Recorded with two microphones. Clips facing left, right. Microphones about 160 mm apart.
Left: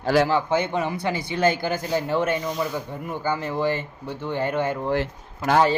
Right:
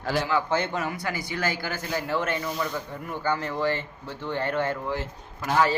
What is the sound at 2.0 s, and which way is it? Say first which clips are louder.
A woman's voice: left 2 dB; 15° left (ahead or behind).